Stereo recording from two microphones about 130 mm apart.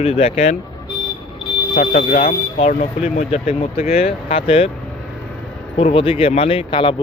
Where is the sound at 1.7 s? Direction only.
70° left (ahead or behind); by 4.7 s 50° left (ahead or behind).